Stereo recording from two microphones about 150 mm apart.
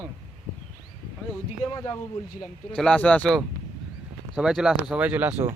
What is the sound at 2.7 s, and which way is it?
Speech, 5° left (ahead or behind).